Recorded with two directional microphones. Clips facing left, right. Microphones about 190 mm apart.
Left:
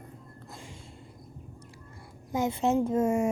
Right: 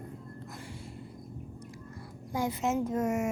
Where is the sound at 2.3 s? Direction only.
25° left (ahead or behind).